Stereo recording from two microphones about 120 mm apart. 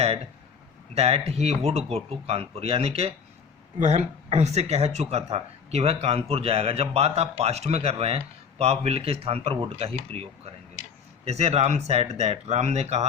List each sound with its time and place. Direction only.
0.9 s speech: 55° right (ahead or behind)